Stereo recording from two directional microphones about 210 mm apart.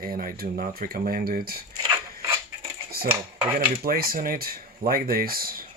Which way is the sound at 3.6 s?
45° right (ahead or behind).